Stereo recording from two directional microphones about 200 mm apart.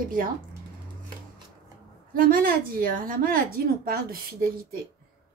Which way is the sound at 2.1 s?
45° right (ahead or behind).